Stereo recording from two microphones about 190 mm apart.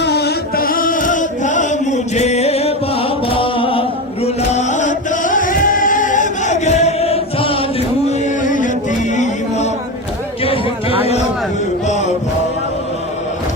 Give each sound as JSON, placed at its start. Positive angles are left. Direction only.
{"t": 0.0, "sound": "singing", "side_deg": 60}
{"t": 8.0, "sound": "a sound", "side_deg": 35}
{"t": 10.4, "sound": "music", "side_deg": 30}